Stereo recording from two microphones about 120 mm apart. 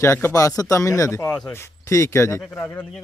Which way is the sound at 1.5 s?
25° left (ahead or behind).